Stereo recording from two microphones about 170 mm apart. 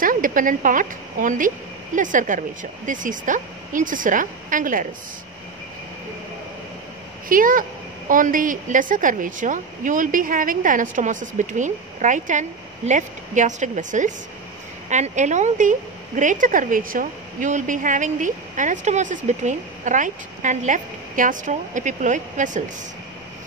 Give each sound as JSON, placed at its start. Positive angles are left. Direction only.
{"t": 0.0, "sound": "a woman's voice", "side_deg": -55}
{"t": 7.2, "sound": "a woman's voice", "side_deg": -55}